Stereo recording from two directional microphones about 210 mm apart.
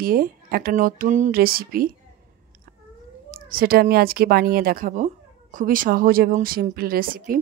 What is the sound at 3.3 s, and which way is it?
Speech, 45° right (ahead or behind).